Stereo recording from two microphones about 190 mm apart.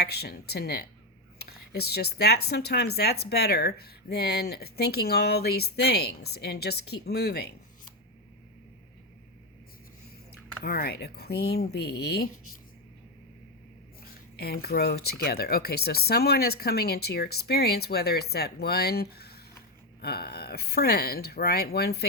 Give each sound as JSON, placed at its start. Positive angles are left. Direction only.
{"t": 0.0, "sound": "speech", "side_deg": 60}
{"t": 10.6, "sound": "speech", "side_deg": 55}
{"t": 14.0, "sound": "speech", "side_deg": 55}